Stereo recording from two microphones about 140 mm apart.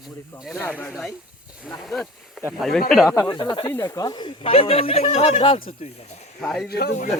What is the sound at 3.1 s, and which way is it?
Speech, 25° left (ahead or behind).